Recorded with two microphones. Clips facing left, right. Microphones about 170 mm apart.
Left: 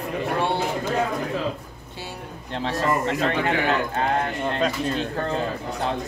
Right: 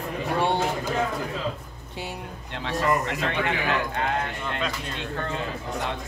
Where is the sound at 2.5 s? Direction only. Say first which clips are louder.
Left 1 dB; 35° left (ahead or behind).